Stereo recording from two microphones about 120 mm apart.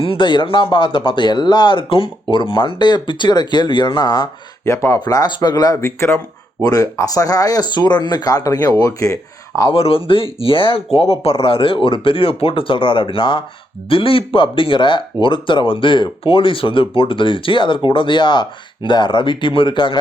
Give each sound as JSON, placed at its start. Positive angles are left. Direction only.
{"t": 0.0, "sound": "speech", "side_deg": 45}
{"t": 4.6, "sound": "speech", "side_deg": 25}
{"t": 9.7, "sound": "speech", "side_deg": 50}